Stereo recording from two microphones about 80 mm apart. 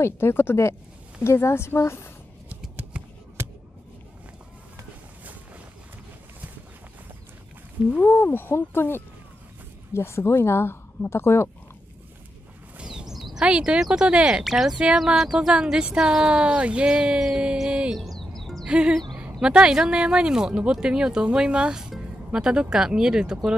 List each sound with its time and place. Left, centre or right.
0.0 s speech: left
2.9 s a sound: centre
7.9 s speech: left
12.7 s a sound: centre
14.4 s speech: centre
17.9 s music: centre
18.7 s speech: centre